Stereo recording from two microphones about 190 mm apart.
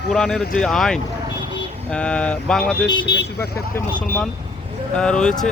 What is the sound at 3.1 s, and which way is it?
Speech, 60° left (ahead or behind).